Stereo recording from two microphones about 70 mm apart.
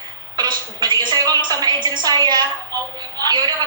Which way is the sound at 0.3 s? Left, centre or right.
Right.